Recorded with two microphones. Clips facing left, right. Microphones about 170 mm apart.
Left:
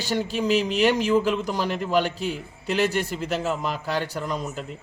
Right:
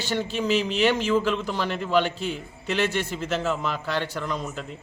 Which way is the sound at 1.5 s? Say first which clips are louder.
Even; 40° left (ahead or behind).